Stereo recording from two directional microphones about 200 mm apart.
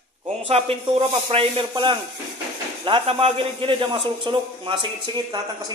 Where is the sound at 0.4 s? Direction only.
30° right (ahead or behind).